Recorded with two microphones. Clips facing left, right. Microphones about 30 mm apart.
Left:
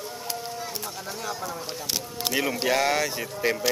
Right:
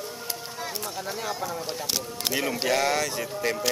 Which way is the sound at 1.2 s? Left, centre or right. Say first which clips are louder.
Even; centre.